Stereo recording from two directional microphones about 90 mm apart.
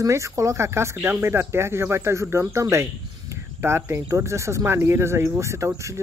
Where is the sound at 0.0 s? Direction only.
35° right (ahead or behind).